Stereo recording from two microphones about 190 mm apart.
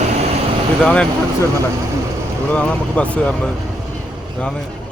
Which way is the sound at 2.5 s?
5° left (ahead or behind).